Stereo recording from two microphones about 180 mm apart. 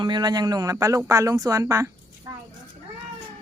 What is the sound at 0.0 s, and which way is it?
Speech, 25° right (ahead or behind).